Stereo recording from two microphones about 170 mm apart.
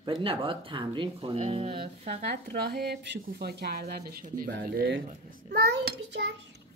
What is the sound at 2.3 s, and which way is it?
A child's voice, 70° right (ahead or behind).